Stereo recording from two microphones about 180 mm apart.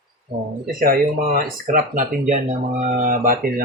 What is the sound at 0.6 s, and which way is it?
Speech, 55° right (ahead or behind).